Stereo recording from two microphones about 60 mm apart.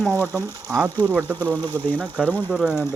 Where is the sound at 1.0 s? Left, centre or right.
Right.